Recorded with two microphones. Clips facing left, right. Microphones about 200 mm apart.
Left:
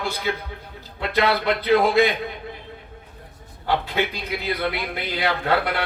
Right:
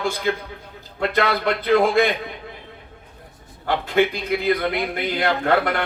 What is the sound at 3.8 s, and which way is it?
A man's voice, 50° right (ahead or behind).